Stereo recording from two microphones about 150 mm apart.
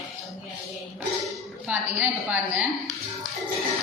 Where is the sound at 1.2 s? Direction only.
10° right (ahead or behind).